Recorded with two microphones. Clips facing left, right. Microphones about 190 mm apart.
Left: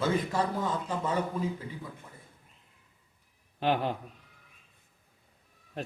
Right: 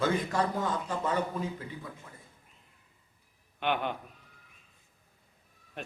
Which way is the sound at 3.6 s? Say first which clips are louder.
Left 3 dB; 35° left (ahead or behind).